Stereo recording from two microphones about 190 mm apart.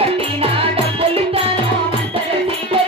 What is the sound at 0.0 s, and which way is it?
Music, 30° right (ahead or behind).